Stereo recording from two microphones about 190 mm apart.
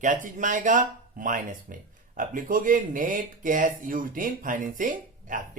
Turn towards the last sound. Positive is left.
turn(degrees=-45)  # may be behind; listen again after turning